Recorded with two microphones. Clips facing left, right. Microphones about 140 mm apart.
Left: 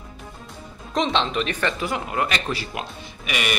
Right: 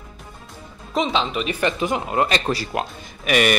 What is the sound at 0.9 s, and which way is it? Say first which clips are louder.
Speech: even; 5° right (ahead or behind).